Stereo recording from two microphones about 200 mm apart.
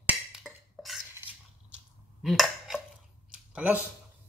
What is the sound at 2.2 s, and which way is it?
Dishes, centre (ahead or behind).